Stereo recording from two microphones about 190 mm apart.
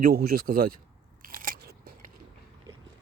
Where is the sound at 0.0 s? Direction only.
55° right (ahead or behind).